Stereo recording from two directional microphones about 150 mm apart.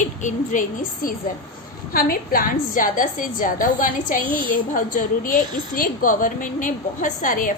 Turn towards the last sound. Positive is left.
turn(degrees=60)  # may be behind; listen again after turning